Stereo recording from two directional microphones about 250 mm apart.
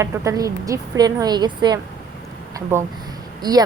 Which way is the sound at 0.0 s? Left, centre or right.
Centre.